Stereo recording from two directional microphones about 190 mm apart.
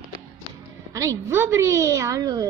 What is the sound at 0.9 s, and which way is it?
A woman's voice, 15° right (ahead or behind).